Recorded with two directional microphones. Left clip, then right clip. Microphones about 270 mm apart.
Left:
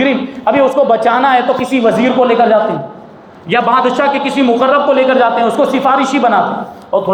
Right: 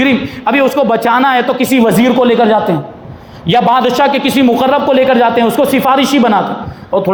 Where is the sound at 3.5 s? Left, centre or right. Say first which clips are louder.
Right 1 dB; right.